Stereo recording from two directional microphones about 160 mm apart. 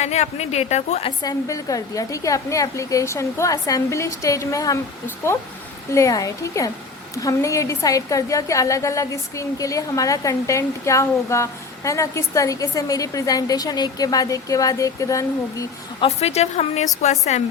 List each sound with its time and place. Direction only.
0.0 s a woman's voice: 45° left (ahead or behind)
1.2 s a woman's voice: 25° left (ahead or behind)
16.0 s a woman's voice: 40° left (ahead or behind)